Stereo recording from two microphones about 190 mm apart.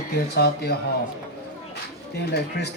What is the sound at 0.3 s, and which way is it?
Speech, 60° left (ahead or behind).